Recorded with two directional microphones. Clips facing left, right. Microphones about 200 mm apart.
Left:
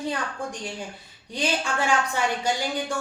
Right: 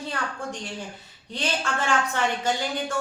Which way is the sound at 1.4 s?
10° left (ahead or behind).